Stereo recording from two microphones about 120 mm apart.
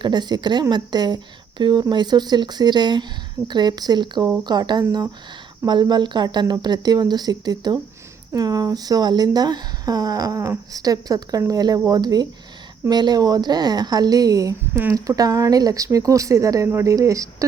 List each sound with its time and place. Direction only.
0.0 s speech: 35° right (ahead or behind)